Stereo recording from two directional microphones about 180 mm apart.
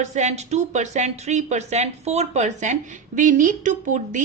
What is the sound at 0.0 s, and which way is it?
A woman's voice, 40° right (ahead or behind).